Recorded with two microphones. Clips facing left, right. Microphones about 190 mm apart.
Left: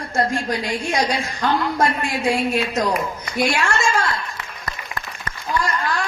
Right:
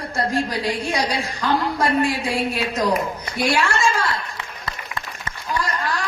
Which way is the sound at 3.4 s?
35° right (ahead or behind).